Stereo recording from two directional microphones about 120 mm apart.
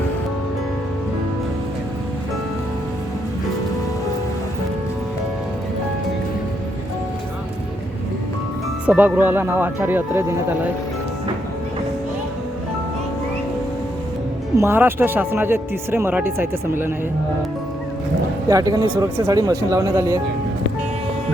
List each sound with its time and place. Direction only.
8.9 s speech: 15° right (ahead or behind)
14.5 s speech: 20° right (ahead or behind)
18.4 s speech: 30° right (ahead or behind)